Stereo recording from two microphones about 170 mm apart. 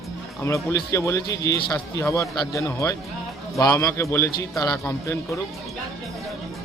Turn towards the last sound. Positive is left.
turn(degrees=15)  # may be behind; listen again after turning